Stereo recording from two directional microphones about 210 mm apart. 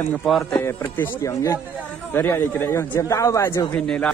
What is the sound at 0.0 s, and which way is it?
Speech, 5° left (ahead or behind).